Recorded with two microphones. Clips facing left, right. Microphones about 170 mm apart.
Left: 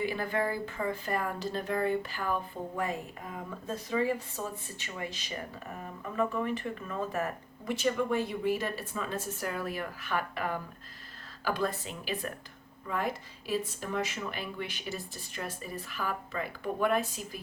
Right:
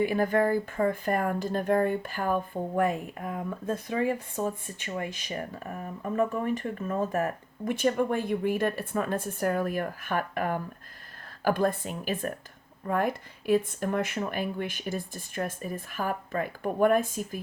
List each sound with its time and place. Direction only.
0.0 s speech: 50° right (ahead or behind)